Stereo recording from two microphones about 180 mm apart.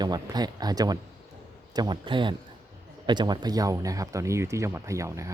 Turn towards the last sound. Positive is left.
turn(degrees=-15)  # may be behind; listen again after turning